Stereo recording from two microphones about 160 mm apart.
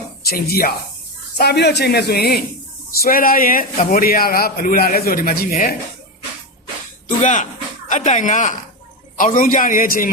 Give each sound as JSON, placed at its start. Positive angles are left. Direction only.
{"t": 0.2, "sound": "speech", "side_deg": 75}
{"t": 1.4, "sound": "speech", "side_deg": 90}
{"t": 3.0, "sound": "a man's voice", "side_deg": 60}
{"t": 7.2, "sound": "a man's voice", "side_deg": 50}